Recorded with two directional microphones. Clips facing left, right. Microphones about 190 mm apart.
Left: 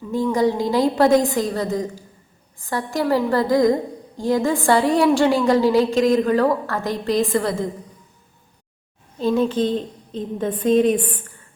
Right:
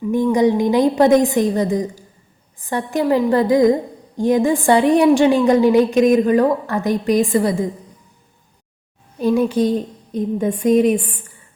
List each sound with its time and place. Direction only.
0.1 s a woman's voice: 15° right (ahead or behind)
9.1 s a woman's voice: 10° right (ahead or behind)